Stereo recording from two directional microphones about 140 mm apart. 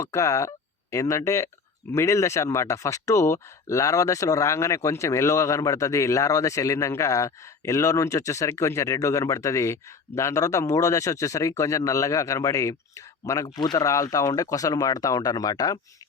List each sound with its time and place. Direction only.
0.0 s speech: 20° left (ahead or behind)